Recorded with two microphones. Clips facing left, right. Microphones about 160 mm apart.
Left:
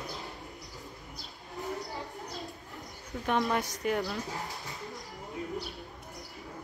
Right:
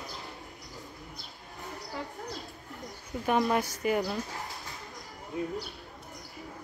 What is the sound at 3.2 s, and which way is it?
Speech, 5° right (ahead or behind).